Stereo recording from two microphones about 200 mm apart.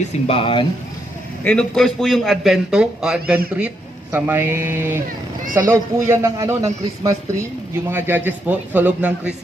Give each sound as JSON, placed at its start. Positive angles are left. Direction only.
{"t": 0.3, "sound": "speech", "side_deg": 25}
{"t": 1.5, "sound": "a man's voice", "side_deg": 5}